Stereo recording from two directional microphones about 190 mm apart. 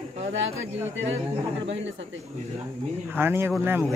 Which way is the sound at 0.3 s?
80° right.